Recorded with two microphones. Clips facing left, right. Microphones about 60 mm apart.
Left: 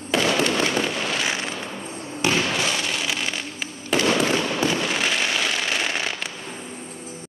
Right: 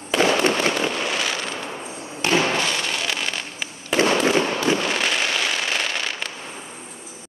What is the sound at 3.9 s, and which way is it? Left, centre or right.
Fireworks, right.